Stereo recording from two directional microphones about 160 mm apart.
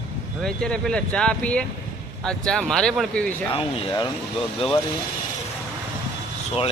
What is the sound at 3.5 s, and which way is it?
Speech, 35° left (ahead or behind).